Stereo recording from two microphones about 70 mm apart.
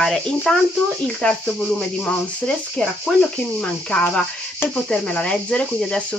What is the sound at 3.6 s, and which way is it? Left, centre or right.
Cricket, left.